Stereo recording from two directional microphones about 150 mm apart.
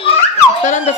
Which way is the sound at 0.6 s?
55° left (ahead or behind).